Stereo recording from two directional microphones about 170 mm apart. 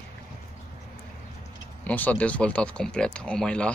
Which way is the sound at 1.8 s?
10° left (ahead or behind).